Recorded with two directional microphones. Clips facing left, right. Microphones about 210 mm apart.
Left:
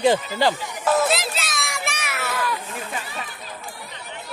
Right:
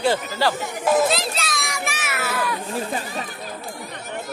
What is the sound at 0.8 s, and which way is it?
Speech, 15° right (ahead or behind).